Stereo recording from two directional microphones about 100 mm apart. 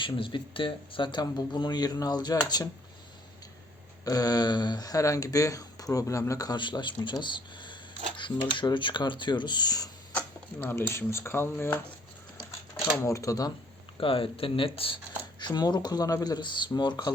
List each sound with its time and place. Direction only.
0.0 s speech: 55° left (ahead or behind)
4.0 s speech: 40° left (ahead or behind)
6.6 s speech: 50° left (ahead or behind)
10.2 s speech: 20° left (ahead or behind)
13.0 s speech: 30° left (ahead or behind)
14.0 s speech: 65° left (ahead or behind)
15.4 s speech: 45° left (ahead or behind)